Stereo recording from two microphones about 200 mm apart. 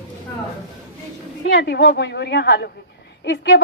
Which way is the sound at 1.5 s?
55° left (ahead or behind).